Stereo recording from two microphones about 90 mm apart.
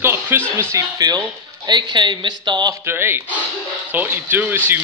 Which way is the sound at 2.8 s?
25° right (ahead or behind).